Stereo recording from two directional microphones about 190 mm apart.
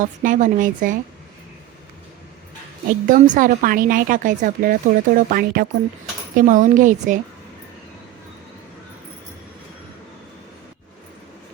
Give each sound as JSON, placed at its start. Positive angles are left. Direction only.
{"t": 0.0, "sound": "speech", "side_deg": -45}
{"t": 3.1, "sound": "speech", "side_deg": -45}